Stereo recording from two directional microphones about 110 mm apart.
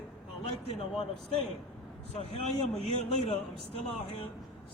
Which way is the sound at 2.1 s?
65° left (ahead or behind).